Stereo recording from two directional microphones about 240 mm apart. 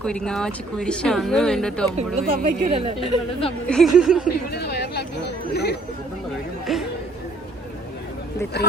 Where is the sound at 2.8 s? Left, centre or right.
Right.